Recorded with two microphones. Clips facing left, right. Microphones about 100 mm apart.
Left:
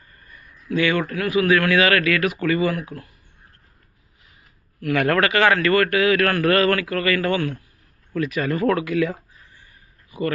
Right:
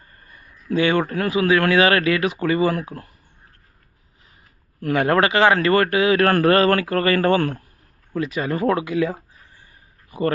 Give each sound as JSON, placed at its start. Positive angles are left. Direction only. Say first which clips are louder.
{"t": 0.0, "sound": "a sound", "louder": "even", "side_deg": -35}
{"t": 1.1, "sound": "a man's voice", "louder": "even", "side_deg": -30}
{"t": 4.8, "sound": "a man's voice", "louder": "right 1 dB", "side_deg": -30}
{"t": 8.1, "sound": "speech", "louder": "even", "side_deg": -25}